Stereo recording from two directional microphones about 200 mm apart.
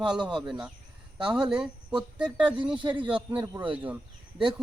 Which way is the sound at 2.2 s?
5° right (ahead or behind).